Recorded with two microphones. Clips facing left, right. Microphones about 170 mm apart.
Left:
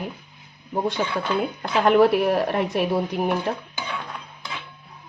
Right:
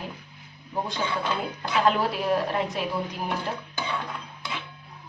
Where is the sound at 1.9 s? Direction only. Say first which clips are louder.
Left 11 dB; 65° left (ahead or behind).